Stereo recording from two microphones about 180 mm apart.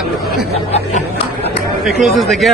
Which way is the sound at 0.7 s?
35° left (ahead or behind).